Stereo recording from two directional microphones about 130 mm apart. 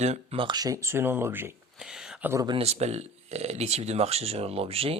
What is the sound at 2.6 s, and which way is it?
Speech, 55° right (ahead or behind).